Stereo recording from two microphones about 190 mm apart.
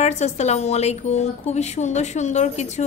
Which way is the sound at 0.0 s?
35° left (ahead or behind).